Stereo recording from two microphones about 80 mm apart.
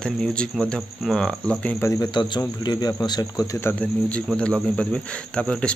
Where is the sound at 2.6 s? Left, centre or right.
Left.